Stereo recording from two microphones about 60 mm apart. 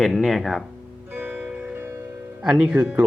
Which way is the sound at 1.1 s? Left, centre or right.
Right.